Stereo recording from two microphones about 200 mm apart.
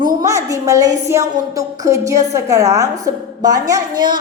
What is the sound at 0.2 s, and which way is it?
A woman's voice, 15° right (ahead or behind).